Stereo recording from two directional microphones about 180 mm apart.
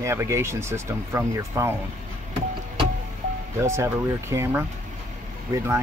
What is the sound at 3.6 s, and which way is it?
Speech, 15° right (ahead or behind).